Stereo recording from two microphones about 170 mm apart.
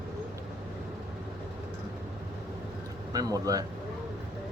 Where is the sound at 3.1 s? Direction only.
20° right (ahead or behind).